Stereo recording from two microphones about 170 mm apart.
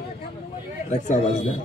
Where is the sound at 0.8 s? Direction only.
50° left (ahead or behind).